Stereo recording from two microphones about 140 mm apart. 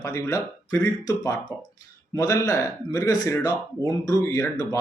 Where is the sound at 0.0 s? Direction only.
20° left (ahead or behind).